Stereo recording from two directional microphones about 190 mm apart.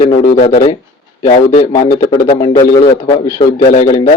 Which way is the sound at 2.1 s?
25° left (ahead or behind).